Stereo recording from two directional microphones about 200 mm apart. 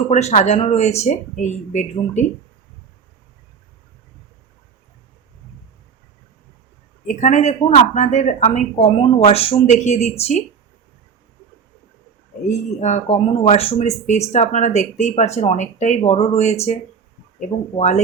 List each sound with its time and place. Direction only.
0.1 s speech: 35° left (ahead or behind)
7.2 s speech: 35° left (ahead or behind)
12.8 s speech: 30° left (ahead or behind)
17.7 s speech: 35° left (ahead or behind)